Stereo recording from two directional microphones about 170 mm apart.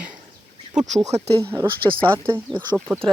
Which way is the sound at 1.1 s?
40° right (ahead or behind).